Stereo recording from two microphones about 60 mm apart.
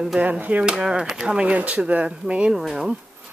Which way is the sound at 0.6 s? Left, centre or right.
Centre.